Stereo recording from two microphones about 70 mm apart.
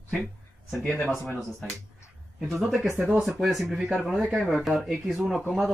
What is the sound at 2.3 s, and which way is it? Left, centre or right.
Speech, centre.